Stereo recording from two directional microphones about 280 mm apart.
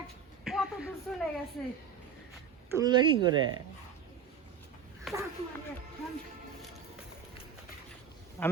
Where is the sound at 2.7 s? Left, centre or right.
Centre.